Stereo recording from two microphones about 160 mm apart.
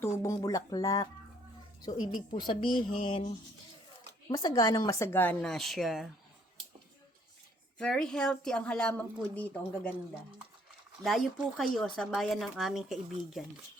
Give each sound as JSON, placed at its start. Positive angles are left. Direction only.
{"t": 0.0, "sound": "speech", "side_deg": 20}
{"t": 4.3, "sound": "speech", "side_deg": 25}
{"t": 7.8, "sound": "speech", "side_deg": 5}
{"t": 11.0, "sound": "speech", "side_deg": 0}